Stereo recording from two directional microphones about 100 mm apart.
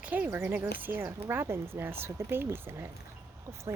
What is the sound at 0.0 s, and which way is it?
Speech, 15° right (ahead or behind).